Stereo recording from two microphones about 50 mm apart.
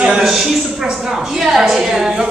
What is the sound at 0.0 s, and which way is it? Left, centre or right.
A woman's voice, centre.